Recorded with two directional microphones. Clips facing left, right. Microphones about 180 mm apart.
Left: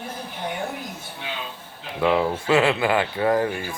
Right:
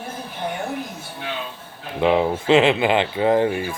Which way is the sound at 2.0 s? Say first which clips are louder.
Right 3 dB; 20° right (ahead or behind).